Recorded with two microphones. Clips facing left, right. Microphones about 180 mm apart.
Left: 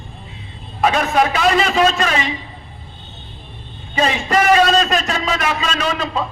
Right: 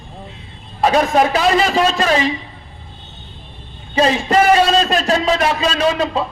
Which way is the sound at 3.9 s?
30° right (ahead or behind).